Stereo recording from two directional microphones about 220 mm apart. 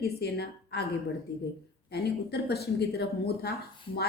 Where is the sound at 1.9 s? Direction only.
45° left (ahead or behind).